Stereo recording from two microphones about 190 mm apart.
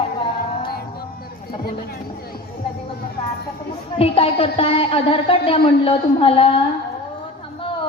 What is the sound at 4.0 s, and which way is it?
A woman's voice, 30° left (ahead or behind).